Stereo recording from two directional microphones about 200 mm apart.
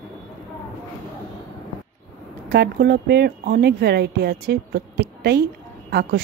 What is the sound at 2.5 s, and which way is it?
Speech, 55° right (ahead or behind).